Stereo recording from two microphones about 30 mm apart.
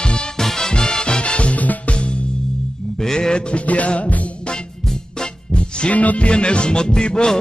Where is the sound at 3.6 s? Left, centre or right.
Left.